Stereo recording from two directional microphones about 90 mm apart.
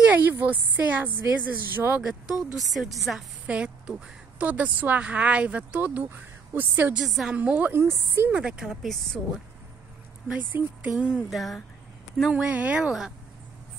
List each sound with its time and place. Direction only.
0.0 s a woman's voice: 20° right (ahead or behind)
2.0 s a woman's voice: 5° right (ahead or behind)
3.4 s a woman's voice: 15° right (ahead or behind)
7.0 s a woman's voice: 5° right (ahead or behind)
7.3 s a woman's voice: 15° right (ahead or behind)
8.3 s speech: 10° right (ahead or behind)
8.8 s a woman's voice: centre (ahead or behind)
10.2 s speech: 15° right (ahead or behind)